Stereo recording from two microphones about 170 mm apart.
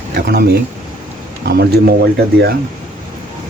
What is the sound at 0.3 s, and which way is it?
Speech, 65° right (ahead or behind).